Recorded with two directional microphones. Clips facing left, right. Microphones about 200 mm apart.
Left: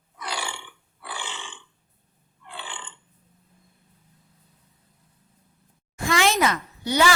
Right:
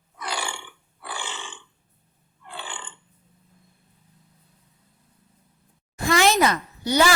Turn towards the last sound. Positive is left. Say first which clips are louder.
# right 1 dB
turn(degrees=-40)  # may be behind; listen again after turning